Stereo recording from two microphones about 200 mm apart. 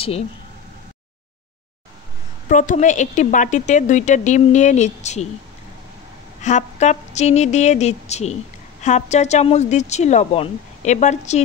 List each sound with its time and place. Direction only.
2.4 s a woman's voice: 40° left (ahead or behind)
6.4 s a woman's voice: 35° left (ahead or behind)